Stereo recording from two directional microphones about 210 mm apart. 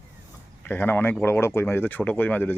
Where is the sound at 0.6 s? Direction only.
10° left (ahead or behind).